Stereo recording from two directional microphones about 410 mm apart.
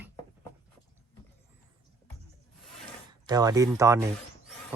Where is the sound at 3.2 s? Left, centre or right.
Centre.